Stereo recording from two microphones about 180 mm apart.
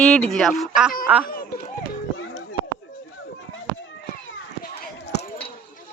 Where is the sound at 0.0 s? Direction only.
5° left (ahead or behind).